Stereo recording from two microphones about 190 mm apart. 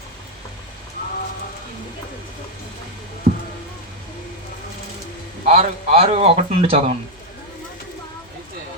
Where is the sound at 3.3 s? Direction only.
40° right (ahead or behind).